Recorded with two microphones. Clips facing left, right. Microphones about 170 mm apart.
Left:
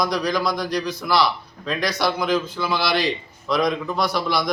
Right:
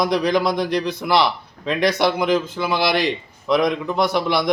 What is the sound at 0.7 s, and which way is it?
Speech, 55° right (ahead or behind).